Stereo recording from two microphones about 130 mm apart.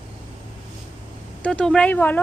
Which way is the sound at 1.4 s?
5° left (ahead or behind).